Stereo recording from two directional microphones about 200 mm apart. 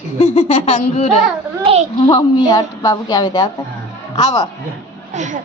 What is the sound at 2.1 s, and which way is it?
A woman's voice, 20° left (ahead or behind).